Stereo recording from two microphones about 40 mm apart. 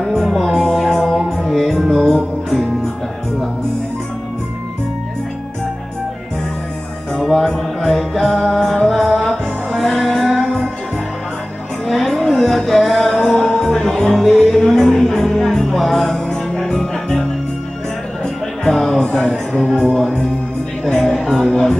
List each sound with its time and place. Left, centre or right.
0.0 s music: centre
7.2 s music: centre
11.9 s music: centre
18.2 s music: centre
20.8 s music: centre